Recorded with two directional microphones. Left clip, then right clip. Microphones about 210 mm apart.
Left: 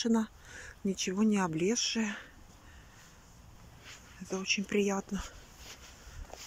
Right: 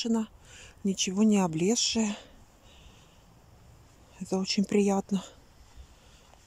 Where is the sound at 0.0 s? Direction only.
5° right (ahead or behind).